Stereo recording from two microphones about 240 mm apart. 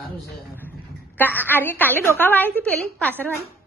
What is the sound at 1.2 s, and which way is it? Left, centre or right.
A woman's voice, centre.